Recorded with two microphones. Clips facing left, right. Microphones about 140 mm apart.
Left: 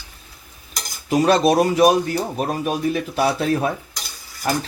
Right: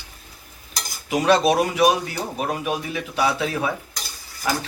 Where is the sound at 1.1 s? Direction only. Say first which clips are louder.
Left 2 dB; 40° left (ahead or behind).